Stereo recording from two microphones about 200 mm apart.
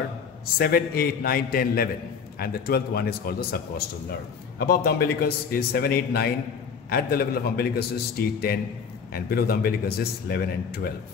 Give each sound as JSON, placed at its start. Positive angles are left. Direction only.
{"t": 0.6, "sound": "speech", "side_deg": 50}